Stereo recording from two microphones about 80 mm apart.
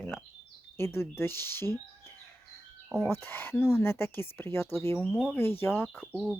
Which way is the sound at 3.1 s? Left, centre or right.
Left.